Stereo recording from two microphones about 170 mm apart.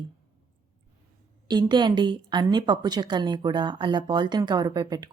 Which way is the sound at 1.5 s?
25° right (ahead or behind).